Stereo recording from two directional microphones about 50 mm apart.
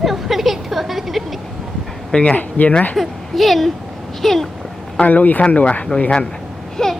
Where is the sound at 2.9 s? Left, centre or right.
Centre.